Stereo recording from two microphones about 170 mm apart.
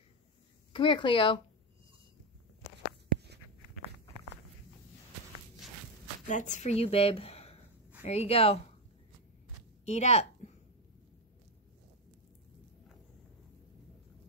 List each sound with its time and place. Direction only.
0.7 s speech: 30° left (ahead or behind)
6.2 s speech: 45° left (ahead or behind)
9.8 s a woman's voice: 40° left (ahead or behind)